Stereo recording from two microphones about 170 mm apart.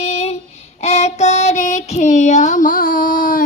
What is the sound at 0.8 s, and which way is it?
Child singing, 40° left (ahead or behind).